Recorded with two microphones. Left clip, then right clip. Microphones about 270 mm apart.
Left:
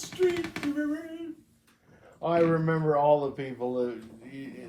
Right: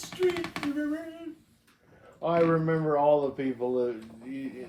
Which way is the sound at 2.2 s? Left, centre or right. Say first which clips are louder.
Even; left.